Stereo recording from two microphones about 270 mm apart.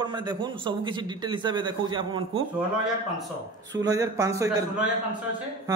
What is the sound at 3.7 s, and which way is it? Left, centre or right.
A man's voice, centre.